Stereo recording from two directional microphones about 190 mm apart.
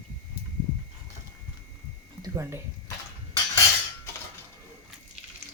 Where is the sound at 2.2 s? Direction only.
15° right (ahead or behind).